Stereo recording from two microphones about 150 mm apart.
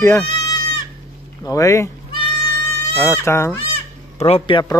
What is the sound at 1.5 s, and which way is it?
Speech, 20° left (ahead or behind).